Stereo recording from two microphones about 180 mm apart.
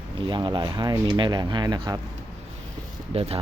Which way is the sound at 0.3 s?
25° right (ahead or behind).